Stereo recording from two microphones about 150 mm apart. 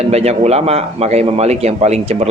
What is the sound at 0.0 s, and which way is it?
Speech, 45° right (ahead or behind).